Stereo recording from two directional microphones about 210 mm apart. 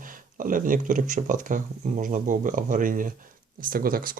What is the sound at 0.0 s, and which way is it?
Speech, 40° right (ahead or behind).